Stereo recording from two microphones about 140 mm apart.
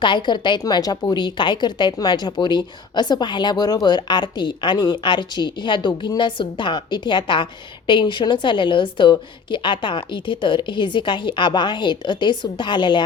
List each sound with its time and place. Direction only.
0.0 s a woman's voice: 35° left (ahead or behind)